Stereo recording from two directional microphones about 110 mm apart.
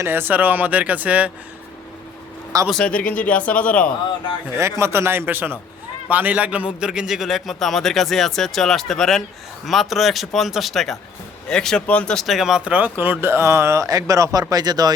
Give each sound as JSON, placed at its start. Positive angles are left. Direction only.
{"t": 0.0, "sound": "speech", "side_deg": -20}
{"t": 2.6, "sound": "speech", "side_deg": 10}
{"t": 4.5, "sound": "a man's voice", "side_deg": -25}